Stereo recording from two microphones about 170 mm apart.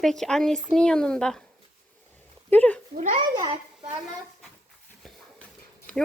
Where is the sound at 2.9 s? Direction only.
50° right (ahead or behind).